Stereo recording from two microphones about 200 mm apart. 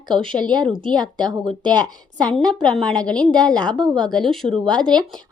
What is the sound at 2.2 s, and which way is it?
Speech, 5° left (ahead or behind).